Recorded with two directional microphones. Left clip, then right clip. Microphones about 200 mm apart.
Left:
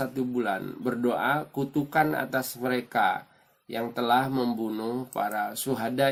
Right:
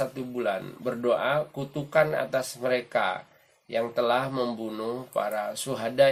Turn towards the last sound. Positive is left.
turn(degrees=40)  # may be behind; listen again after turning